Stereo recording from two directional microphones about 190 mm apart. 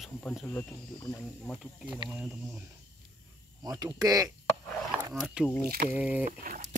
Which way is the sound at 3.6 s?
20° right (ahead or behind).